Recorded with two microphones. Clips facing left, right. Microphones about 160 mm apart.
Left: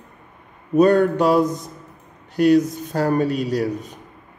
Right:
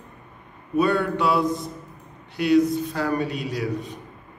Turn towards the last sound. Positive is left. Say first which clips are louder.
# left 5 dB
turn(degrees=40)  # may be behind; listen again after turning